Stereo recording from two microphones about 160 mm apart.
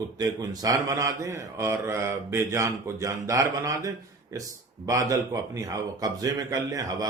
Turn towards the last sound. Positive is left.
turn(degrees=-25)  # may be behind; listen again after turning